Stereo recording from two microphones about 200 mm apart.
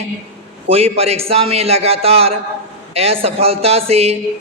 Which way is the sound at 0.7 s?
30° right (ahead or behind).